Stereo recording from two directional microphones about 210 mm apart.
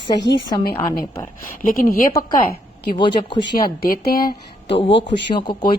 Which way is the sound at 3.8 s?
45° left (ahead or behind).